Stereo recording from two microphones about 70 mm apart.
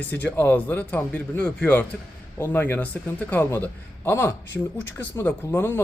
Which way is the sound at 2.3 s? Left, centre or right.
Left.